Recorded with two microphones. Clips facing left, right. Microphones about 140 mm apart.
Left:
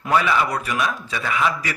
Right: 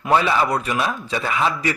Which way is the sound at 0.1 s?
30° right (ahead or behind).